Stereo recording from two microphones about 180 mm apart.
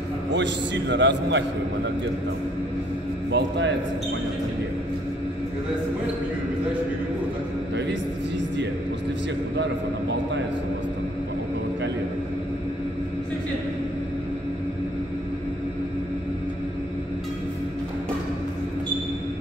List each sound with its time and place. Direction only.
0.3 s a man's voice: 75° right (ahead or behind)
3.3 s a man's voice: 75° right (ahead or behind)
9.6 s a man's voice: 75° right (ahead or behind)